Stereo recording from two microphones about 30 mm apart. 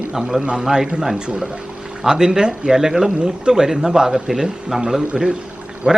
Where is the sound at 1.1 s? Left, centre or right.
Right.